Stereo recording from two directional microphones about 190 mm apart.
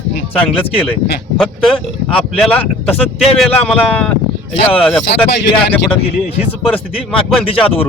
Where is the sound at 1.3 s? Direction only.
Centre (ahead or behind).